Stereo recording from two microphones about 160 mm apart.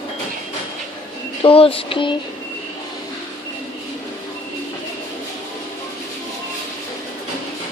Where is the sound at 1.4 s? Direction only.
35° left (ahead or behind).